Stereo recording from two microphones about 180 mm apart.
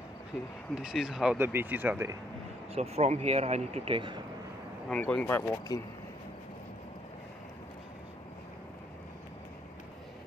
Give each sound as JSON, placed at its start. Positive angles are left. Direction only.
{"t": 0.7, "sound": "speech", "side_deg": -5}
{"t": 2.7, "sound": "speech", "side_deg": -35}
{"t": 4.8, "sound": "speech", "side_deg": 5}